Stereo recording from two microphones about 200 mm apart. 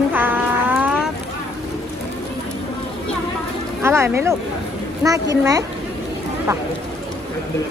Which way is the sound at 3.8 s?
15° right (ahead or behind).